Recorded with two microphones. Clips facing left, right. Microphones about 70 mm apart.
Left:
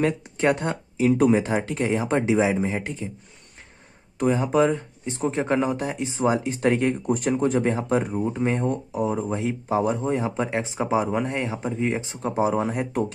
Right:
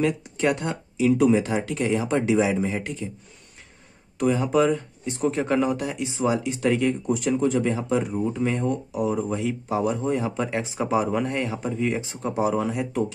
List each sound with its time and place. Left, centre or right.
0.0 s speech: left
4.2 s speech: left